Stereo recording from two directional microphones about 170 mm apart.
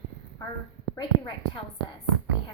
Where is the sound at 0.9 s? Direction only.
30° left (ahead or behind).